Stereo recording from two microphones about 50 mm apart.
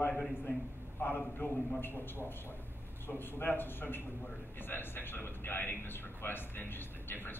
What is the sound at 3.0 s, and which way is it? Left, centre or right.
A man's voice, left.